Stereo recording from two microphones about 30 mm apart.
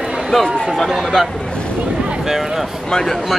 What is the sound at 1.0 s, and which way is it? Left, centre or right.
Speech, centre.